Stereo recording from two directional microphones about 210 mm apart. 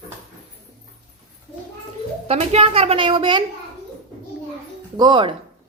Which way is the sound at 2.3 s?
30° right (ahead or behind).